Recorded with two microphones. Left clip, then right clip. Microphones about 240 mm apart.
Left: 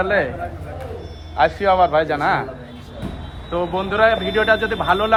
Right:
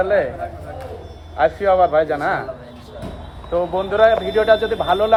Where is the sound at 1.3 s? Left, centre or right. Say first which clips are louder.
Even; centre.